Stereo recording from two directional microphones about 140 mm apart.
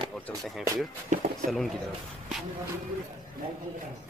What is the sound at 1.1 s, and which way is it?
Speech, 60° right (ahead or behind).